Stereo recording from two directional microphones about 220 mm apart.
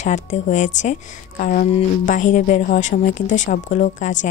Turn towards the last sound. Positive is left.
turn(degrees=35)  # may be behind; listen again after turning